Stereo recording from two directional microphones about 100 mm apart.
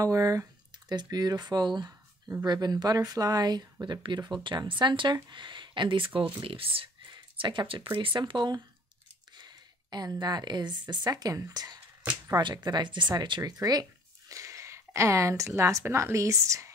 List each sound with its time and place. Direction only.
0.0 s speech: 35° right (ahead or behind); by 6.9 s 65° right (ahead or behind)
7.1 s speech: 50° right (ahead or behind)
9.3 s a sound: 45° right (ahead or behind)
10.2 s speech: 45° right (ahead or behind)
13.4 s speech: 35° right (ahead or behind)